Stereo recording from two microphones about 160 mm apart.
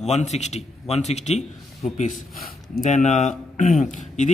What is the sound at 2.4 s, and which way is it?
A man's voice, 50° left (ahead or behind).